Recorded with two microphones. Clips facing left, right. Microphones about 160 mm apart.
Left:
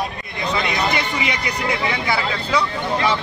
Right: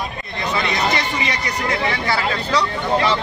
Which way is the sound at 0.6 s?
10° left (ahead or behind).